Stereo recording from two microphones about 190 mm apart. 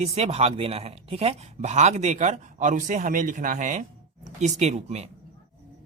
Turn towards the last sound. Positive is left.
turn(degrees=-35)  # may be behind; listen again after turning